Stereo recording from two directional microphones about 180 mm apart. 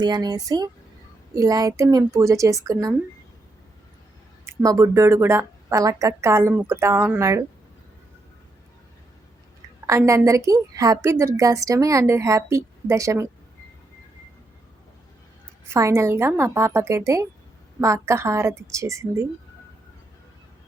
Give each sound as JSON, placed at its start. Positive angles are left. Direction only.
{"t": 0.0, "sound": "a woman's voice", "side_deg": -20}
{"t": 4.4, "sound": "a woman's voice", "side_deg": -20}
{"t": 9.8, "sound": "a woman's voice", "side_deg": -15}
{"t": 15.7, "sound": "a woman's voice", "side_deg": -15}